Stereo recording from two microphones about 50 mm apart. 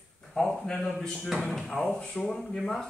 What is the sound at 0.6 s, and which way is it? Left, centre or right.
Speech, centre.